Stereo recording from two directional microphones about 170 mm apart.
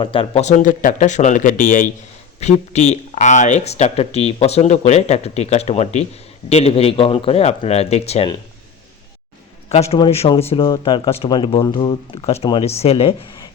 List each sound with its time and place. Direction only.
0.0 s speech: 30° left (ahead or behind)
9.6 s speech: 40° left (ahead or behind)